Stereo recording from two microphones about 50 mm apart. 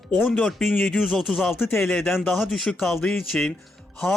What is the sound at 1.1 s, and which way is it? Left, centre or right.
Speech, centre.